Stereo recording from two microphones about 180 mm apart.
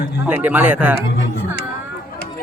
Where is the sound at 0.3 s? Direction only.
10° right (ahead or behind).